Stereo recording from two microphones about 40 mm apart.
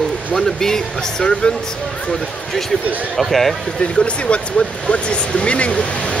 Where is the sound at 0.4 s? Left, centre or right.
Centre.